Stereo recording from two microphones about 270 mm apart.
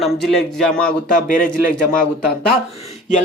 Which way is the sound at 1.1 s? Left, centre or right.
Left.